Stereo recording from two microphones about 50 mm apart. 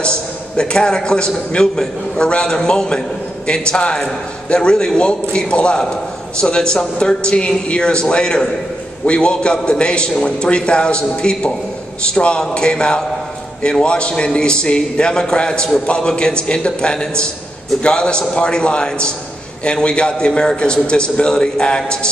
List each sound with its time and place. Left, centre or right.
0.0 s a man's voice: centre